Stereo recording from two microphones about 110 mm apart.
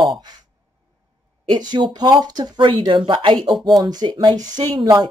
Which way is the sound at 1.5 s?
40° right (ahead or behind).